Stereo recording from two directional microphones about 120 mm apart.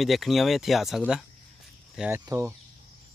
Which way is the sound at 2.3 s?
25° right (ahead or behind).